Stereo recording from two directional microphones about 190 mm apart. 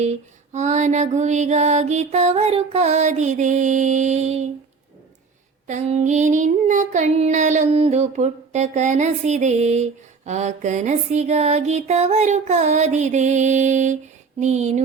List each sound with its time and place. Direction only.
0.5 s child singing: 40° right (ahead or behind)
5.6 s child singing: 35° right (ahead or behind)